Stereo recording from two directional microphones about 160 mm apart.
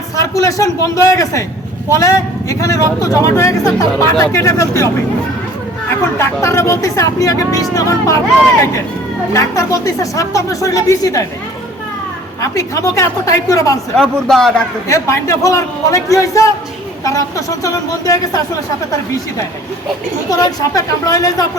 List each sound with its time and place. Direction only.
0.2 s speech: 20° left (ahead or behind)
6.1 s speech: 15° left (ahead or behind)
9.3 s speech: 20° left (ahead or behind)
12.4 s speech: 20° left (ahead or behind)
13.9 s a man's voice: centre (ahead or behind)
14.8 s speech: 20° left (ahead or behind)
20.3 s speech: 20° left (ahead or behind)